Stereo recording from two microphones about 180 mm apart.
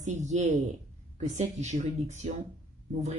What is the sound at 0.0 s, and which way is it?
A woman's voice, 40° right (ahead or behind).